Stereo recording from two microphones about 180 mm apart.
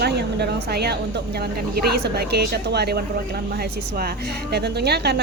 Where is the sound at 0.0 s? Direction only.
65° right (ahead or behind).